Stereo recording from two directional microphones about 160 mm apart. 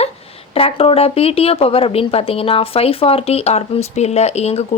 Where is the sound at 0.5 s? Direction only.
35° left (ahead or behind).